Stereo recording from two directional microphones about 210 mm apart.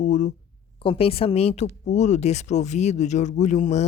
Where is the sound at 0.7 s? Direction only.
25° left (ahead or behind).